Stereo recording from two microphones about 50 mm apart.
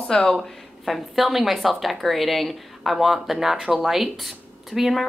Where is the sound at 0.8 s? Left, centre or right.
Centre.